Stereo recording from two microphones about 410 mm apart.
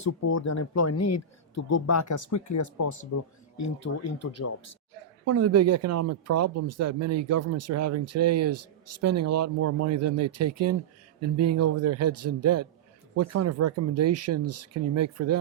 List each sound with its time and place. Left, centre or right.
0.0 s speech: left
5.2 s speech: right